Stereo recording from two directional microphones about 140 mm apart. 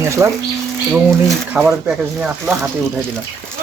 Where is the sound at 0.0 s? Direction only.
20° right (ahead or behind).